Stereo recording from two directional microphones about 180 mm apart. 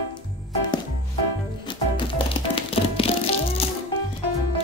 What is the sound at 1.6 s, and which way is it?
Music, 30° left (ahead or behind).